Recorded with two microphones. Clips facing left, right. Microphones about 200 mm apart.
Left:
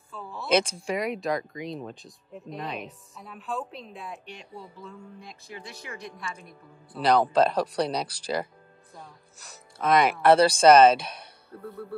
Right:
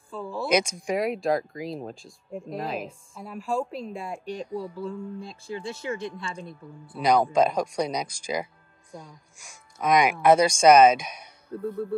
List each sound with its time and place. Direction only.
0.1 s a sound: 30° right (ahead or behind)
0.5 s speech: 15° right (ahead or behind)
0.9 s speech: centre (ahead or behind)
4.7 s a woman's voice: 30° right (ahead or behind)
7.0 s speech: 10° right (ahead or behind)